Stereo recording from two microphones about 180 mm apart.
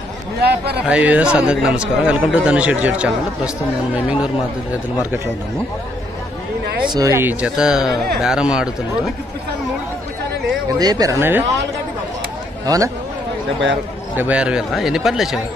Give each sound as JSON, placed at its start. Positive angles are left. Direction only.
{"t": 0.4, "sound": "a man's voice", "side_deg": -65}
{"t": 0.8, "sound": "a man's voice", "side_deg": -10}
{"t": 6.9, "sound": "a man's voice", "side_deg": -20}
{"t": 10.8, "sound": "a man's voice", "side_deg": -20}
{"t": 12.6, "sound": "speech", "side_deg": -20}
{"t": 14.1, "sound": "speech", "side_deg": -10}